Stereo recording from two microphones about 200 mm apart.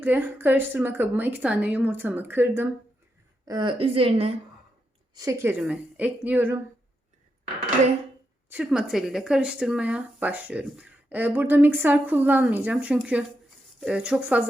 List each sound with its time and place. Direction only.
0.0 s speech: 10° right (ahead or behind)
3.4 s a woman's voice: 20° right (ahead or behind)
5.1 s speech: 15° right (ahead or behind)
8.4 s speech: 5° right (ahead or behind)